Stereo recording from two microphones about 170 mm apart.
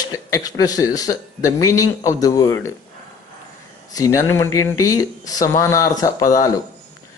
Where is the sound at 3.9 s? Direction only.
20° left (ahead or behind).